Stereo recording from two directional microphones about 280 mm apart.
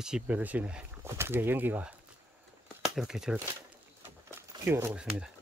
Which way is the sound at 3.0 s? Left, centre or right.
Centre.